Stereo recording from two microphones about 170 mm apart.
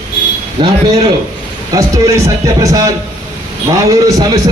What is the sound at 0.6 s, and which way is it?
Speech, 25° right (ahead or behind).